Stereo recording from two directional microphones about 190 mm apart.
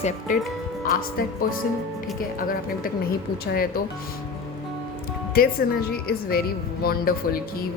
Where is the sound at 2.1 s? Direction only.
50° left (ahead or behind).